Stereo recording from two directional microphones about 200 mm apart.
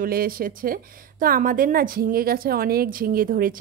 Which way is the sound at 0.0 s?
45° right (ahead or behind).